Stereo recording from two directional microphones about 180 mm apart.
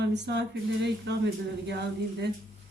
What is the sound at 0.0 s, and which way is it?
Speech, 70° right (ahead or behind).